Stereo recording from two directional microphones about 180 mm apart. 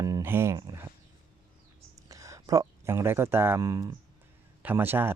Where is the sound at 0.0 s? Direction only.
15° right (ahead or behind).